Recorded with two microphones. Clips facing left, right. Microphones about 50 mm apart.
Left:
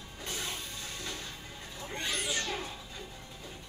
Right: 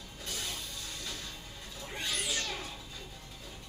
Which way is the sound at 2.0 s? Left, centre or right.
Centre.